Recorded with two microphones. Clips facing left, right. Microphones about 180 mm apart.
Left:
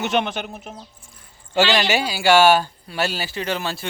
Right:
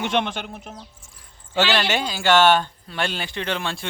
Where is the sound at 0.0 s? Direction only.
Centre (ahead or behind).